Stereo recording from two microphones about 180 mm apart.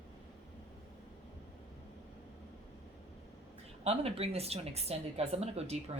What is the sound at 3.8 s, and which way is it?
Speech, 35° right (ahead or behind).